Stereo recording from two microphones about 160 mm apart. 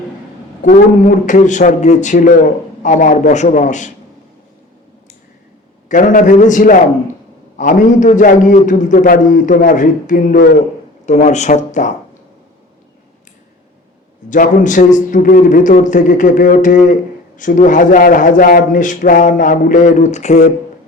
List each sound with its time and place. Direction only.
0.6 s a man's voice: 55° left (ahead or behind)
5.9 s a man's voice: 55° left (ahead or behind)
14.3 s a man's voice: 55° left (ahead or behind)